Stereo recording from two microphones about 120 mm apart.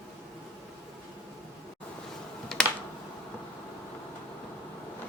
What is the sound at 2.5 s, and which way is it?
Computer keyboard, 5° left (ahead or behind).